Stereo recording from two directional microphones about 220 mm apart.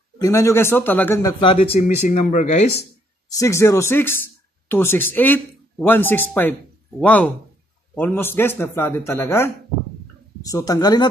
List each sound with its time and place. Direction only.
0.2 s a man's voice: 15° left (ahead or behind)
1.4 s speech: 25° left (ahead or behind)
3.3 s a man's voice: 15° left (ahead or behind)
10.5 s a man's voice: 15° left (ahead or behind)